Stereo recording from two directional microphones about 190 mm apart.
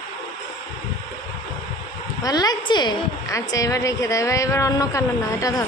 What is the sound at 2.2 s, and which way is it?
A woman's voice, 20° left (ahead or behind).